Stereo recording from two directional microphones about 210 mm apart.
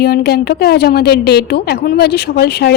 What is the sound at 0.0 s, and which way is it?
A woman's voice, 50° left (ahead or behind).